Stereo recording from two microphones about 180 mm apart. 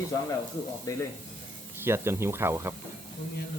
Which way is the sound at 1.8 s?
15° right (ahead or behind).